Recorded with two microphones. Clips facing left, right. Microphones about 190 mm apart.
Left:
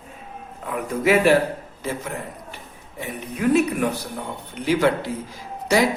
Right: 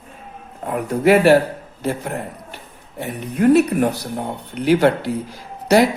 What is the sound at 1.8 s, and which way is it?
Speech, 65° right (ahead or behind).